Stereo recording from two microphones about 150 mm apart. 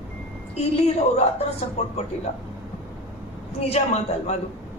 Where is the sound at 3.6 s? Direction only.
45° left (ahead or behind).